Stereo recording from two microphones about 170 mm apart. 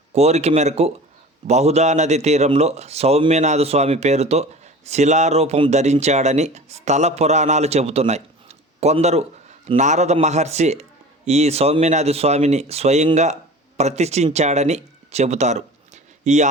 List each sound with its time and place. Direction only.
0.1 s speech: 40° right (ahead or behind)